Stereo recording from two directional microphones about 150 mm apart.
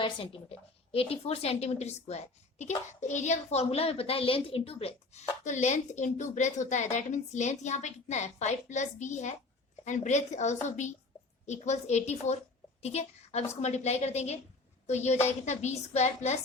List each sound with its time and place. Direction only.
0.0 s a woman's voice: 35° left (ahead or behind)
5.4 s a woman's voice: 50° left (ahead or behind)